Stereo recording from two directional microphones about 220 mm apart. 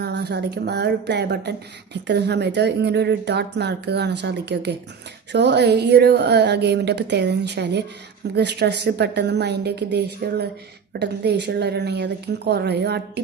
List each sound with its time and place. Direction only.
0.0 s a woman's voice: 50° right (ahead or behind)